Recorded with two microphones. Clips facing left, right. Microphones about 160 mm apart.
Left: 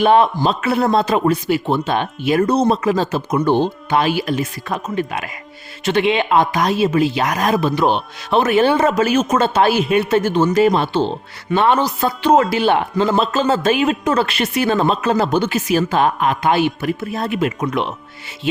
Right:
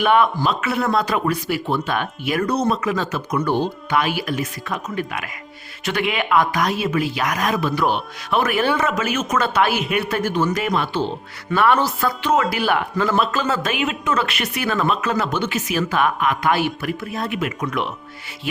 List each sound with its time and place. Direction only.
0.0 s a man's voice: 30° left (ahead or behind)